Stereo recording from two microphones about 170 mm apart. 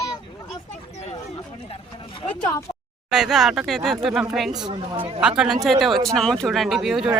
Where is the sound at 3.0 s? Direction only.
5° right (ahead or behind).